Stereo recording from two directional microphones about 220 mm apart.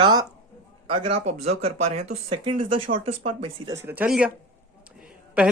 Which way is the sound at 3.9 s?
5° right (ahead or behind).